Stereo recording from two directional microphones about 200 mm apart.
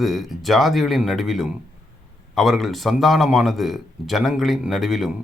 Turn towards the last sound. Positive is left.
turn(degrees=0)  # may be behind; listen again after turning